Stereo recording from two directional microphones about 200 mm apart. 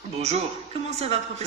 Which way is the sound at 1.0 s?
30° right (ahead or behind).